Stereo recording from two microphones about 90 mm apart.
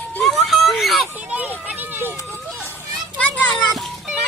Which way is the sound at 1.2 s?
15° right (ahead or behind).